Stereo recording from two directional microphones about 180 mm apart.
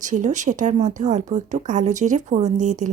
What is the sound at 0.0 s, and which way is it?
Speech, 45° right (ahead or behind).